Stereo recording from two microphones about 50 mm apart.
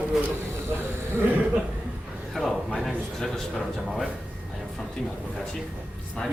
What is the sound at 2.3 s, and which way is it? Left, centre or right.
Speech, centre.